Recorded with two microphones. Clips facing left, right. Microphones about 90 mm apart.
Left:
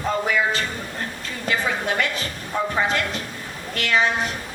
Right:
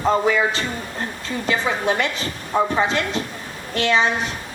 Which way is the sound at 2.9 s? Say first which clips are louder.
Right 2 dB; 25° right (ahead or behind).